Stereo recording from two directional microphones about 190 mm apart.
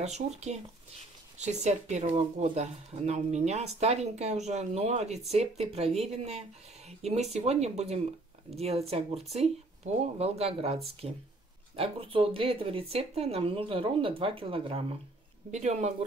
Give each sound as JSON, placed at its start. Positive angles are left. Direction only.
{"t": 0.0, "sound": "speech", "side_deg": -35}